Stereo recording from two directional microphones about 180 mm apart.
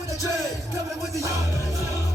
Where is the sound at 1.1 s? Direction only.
15° right (ahead or behind).